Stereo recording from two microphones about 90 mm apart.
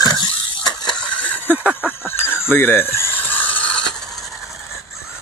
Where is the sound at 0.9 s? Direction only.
15° left (ahead or behind).